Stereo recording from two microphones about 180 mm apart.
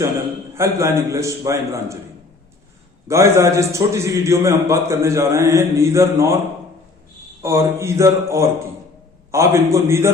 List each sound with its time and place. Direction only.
0.5 s a man's voice: 15° right (ahead or behind)
3.1 s a man's voice: 15° right (ahead or behind)
7.4 s a man's voice: 15° right (ahead or behind)